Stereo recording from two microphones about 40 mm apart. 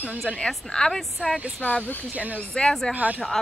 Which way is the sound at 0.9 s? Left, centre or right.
Centre.